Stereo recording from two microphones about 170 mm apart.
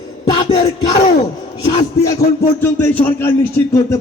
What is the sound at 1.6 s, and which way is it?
A man's voice, 20° left (ahead or behind).